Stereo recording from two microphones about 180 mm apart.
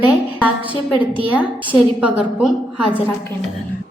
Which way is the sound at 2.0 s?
5° right (ahead or behind).